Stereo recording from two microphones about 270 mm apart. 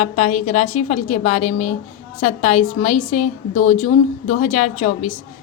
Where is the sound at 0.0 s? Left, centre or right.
Left.